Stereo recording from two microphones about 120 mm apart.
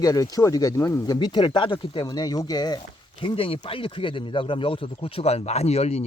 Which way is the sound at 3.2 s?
50° left (ahead or behind).